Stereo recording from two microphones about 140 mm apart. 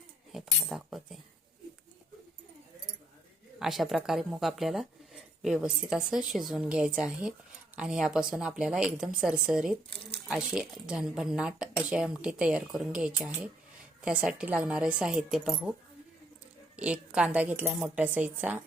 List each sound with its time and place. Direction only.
0.3 s speech: centre (ahead or behind)
3.6 s a woman's voice: centre (ahead or behind)
16.7 s a woman's voice: 10° right (ahead or behind)